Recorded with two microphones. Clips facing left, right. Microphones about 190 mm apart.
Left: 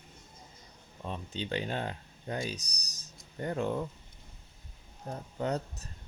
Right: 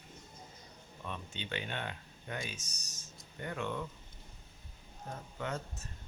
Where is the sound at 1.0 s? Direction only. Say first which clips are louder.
Left 6 dB; 35° left (ahead or behind).